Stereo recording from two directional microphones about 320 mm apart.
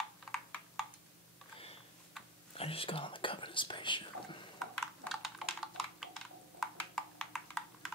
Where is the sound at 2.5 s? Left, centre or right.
Centre.